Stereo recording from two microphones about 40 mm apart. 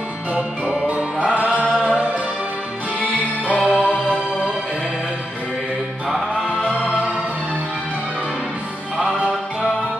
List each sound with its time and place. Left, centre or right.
0.8 s music: right
3.4 s music: right
3.8 s music: left
6.0 s music: centre